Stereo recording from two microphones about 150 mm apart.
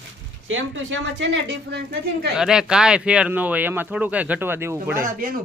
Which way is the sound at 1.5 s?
90° right.